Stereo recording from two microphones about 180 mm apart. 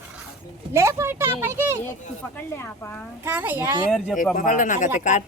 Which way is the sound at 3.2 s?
10° right (ahead or behind).